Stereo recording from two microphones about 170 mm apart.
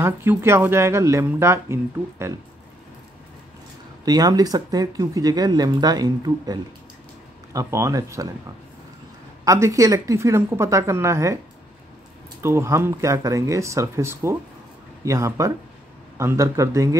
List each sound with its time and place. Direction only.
0.0 s speech: 15° right (ahead or behind)
4.0 s speech: 20° right (ahead or behind)
9.4 s speech: 20° right (ahead or behind)
12.4 s speech: 15° right (ahead or behind)